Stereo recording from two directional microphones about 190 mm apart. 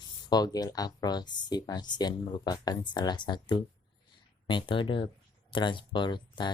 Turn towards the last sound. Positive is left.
turn(degrees=25)  # may be behind; listen again after turning